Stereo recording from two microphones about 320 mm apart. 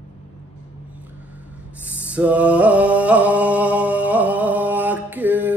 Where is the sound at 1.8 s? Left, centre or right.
Centre.